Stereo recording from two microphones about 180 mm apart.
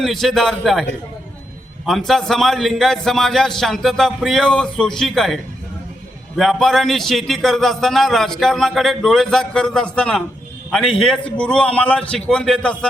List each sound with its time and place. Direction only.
0.0 s a man's voice: centre (ahead or behind)
1.9 s a man's voice: centre (ahead or behind)